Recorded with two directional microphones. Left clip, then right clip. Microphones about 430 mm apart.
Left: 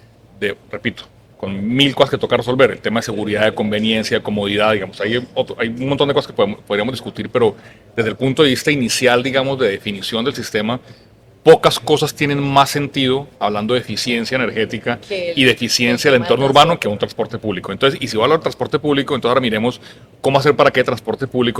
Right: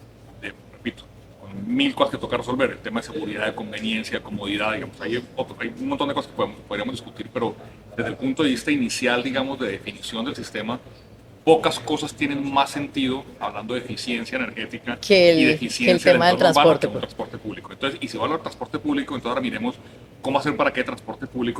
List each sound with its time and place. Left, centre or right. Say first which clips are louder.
0.4 s speech: left 12 dB; left
15.1 s speech: right 13 dB; right
15.4 s speech: left 6 dB; left